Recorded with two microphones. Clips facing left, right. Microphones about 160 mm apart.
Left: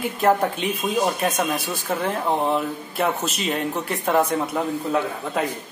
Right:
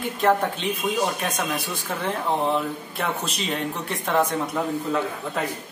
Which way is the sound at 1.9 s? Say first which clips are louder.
Left 3 dB; 5° left (ahead or behind).